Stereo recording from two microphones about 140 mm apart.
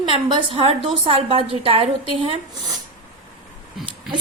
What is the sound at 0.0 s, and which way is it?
A woman's voice, 40° right (ahead or behind).